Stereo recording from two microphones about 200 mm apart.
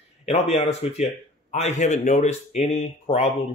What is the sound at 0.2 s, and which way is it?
Speech, 30° left (ahead or behind).